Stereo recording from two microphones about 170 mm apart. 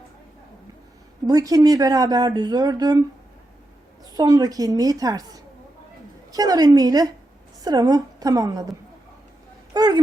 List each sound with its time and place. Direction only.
1.3 s speech: 20° right (ahead or behind)
4.1 s speech: 25° right (ahead or behind)
9.7 s a sound: 25° right (ahead or behind)